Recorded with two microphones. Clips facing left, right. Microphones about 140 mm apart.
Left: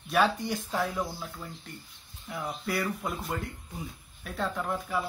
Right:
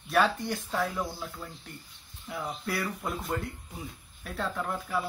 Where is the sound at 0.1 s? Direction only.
Centre (ahead or behind).